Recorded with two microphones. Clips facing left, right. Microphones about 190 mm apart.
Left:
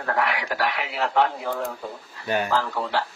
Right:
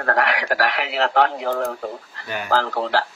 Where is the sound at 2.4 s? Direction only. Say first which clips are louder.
Right 4 dB; 75° right (ahead or behind).